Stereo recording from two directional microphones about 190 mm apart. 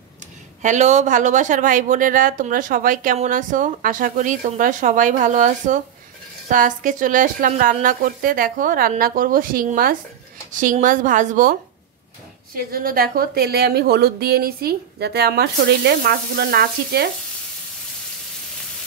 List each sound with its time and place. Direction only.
0.6 s speech: 40° right (ahead or behind)
12.5 s a woman's voice: 50° right (ahead or behind)